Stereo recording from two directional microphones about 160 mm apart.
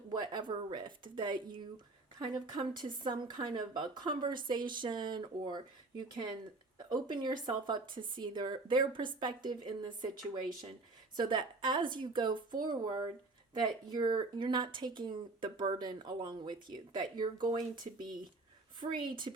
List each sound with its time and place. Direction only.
0.1 s speech: 25° right (ahead or behind)
11.2 s speech: 30° right (ahead or behind)
18.8 s speech: 30° right (ahead or behind)